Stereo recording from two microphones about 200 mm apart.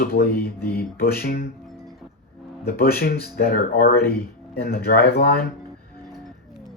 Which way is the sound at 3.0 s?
50° left (ahead or behind).